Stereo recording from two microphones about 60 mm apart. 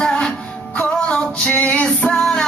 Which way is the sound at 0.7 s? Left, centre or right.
Left.